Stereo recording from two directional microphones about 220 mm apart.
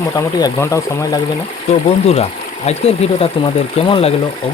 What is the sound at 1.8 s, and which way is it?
Speech, 30° left (ahead or behind).